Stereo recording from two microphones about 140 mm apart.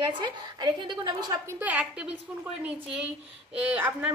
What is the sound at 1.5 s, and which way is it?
A woman's voice, 10° right (ahead or behind).